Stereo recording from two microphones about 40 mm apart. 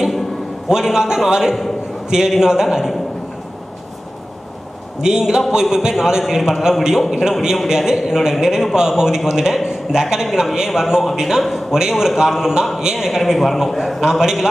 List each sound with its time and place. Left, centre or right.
0.7 s a man's voice: centre
5.0 s a man's voice: centre